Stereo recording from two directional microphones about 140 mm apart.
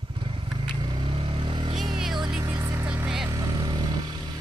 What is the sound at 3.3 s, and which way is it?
Vehicle, 30° right (ahead or behind).